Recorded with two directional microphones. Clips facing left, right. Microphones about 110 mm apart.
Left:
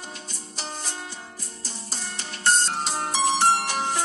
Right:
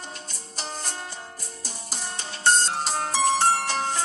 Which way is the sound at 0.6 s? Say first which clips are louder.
Right 1 dB; centre (ahead or behind).